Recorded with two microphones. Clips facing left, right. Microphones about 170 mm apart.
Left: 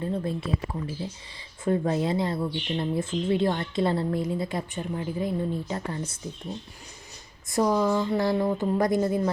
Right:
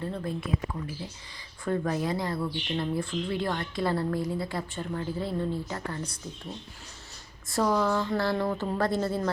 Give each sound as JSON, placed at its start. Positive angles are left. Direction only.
{"t": 0.0, "sound": "speech", "side_deg": 25}
{"t": 7.5, "sound": "a woman's voice", "side_deg": 15}